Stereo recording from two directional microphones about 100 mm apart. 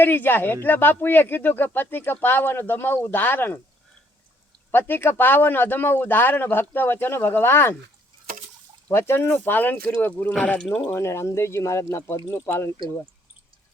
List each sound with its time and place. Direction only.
0.0 s speech: 20° left (ahead or behind)
4.7 s speech: 20° left (ahead or behind)
8.9 s speech: 25° left (ahead or behind)